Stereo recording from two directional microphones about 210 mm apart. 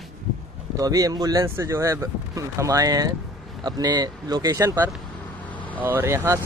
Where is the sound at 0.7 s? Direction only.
15° right (ahead or behind).